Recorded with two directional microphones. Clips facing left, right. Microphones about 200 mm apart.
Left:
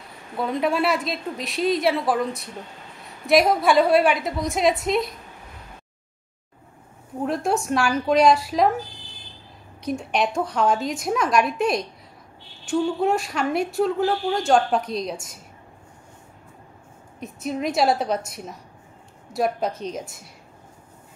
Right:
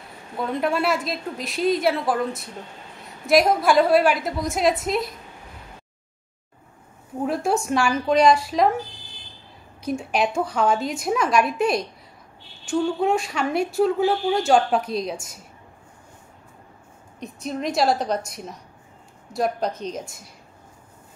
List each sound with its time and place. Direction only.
0.4 s a woman's voice: centre (ahead or behind)
7.2 s a woman's voice: centre (ahead or behind)
9.8 s a woman's voice: centre (ahead or behind)
17.2 s a woman's voice: 5° left (ahead or behind)